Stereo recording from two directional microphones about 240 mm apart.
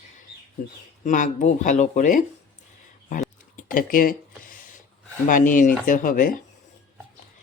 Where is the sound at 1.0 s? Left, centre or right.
Left.